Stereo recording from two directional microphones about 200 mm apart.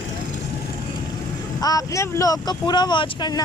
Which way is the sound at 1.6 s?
15° left (ahead or behind).